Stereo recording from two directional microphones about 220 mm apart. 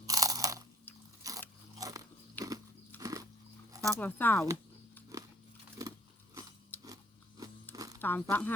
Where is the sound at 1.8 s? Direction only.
15° right (ahead or behind).